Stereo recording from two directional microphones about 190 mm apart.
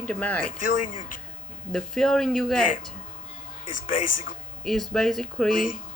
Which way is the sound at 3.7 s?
45° left (ahead or behind).